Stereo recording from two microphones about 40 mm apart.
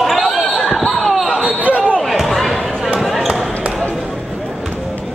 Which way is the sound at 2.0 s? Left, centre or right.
Centre.